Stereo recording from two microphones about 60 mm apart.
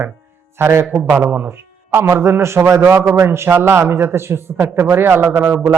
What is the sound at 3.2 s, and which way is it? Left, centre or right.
A man's voice, right.